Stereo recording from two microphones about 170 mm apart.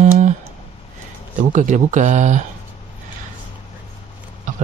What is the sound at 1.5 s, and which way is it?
Speech, 45° right (ahead or behind).